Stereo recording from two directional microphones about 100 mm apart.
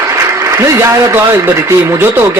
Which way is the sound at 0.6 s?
30° right (ahead or behind).